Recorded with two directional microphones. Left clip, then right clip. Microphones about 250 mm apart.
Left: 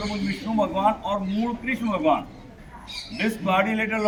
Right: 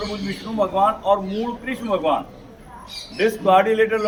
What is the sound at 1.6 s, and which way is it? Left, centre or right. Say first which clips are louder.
Speech: right 1 dB; centre.